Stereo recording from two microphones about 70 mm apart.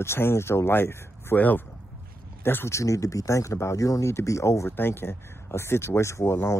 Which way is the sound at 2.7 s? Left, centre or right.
Left.